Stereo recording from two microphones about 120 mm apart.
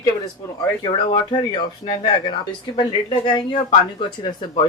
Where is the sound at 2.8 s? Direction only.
40° left (ahead or behind).